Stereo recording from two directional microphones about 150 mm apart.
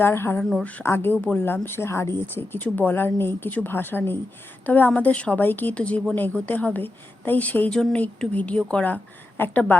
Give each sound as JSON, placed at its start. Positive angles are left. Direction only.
{"t": 0.0, "sound": "a woman's voice", "side_deg": 15}